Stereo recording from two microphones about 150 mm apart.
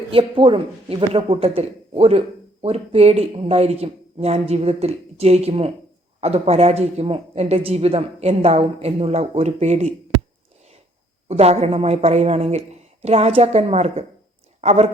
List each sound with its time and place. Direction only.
0.1 s speech: 35° right (ahead or behind)
11.3 s speech: 45° right (ahead or behind)